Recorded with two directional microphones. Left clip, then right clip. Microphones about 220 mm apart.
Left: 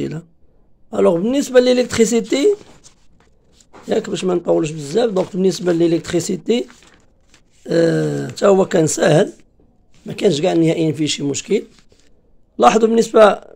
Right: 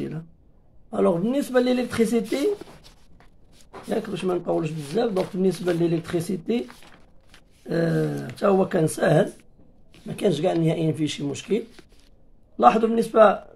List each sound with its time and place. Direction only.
0.8 s speech: 40° left (ahead or behind)
3.9 s speech: 45° left (ahead or behind)
7.6 s speech: 50° left (ahead or behind)